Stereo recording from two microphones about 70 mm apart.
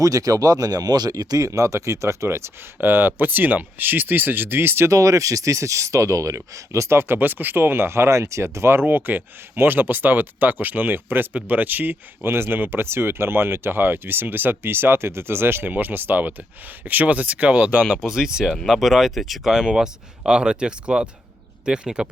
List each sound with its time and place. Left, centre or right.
0.0 s speech: right
1.5 s speech: right
2.8 s speech: right
4.9 s speech: right
17.7 s speech: centre
18.0 s speech: centre